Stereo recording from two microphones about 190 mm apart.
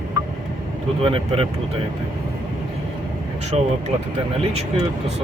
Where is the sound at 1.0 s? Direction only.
30° right (ahead or behind).